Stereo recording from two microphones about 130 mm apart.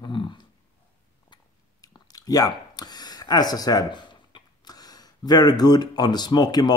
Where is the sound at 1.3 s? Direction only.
35° left (ahead or behind).